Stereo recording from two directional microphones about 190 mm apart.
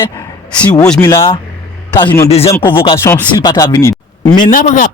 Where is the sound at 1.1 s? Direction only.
25° left (ahead or behind).